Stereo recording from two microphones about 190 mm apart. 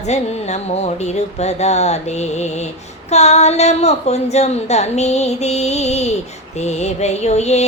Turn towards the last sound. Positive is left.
turn(degrees=35)  # may be behind; listen again after turning